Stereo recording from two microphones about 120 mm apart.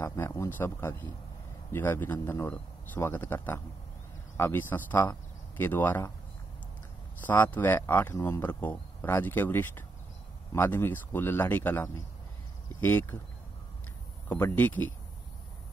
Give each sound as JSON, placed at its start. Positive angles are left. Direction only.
{"t": 0.0, "sound": "a man's voice", "side_deg": 25}
{"t": 7.2, "sound": "speech", "side_deg": 15}
{"t": 14.3, "sound": "speech", "side_deg": 15}